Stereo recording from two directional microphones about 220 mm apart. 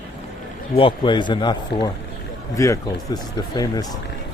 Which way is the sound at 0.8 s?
25° left (ahead or behind).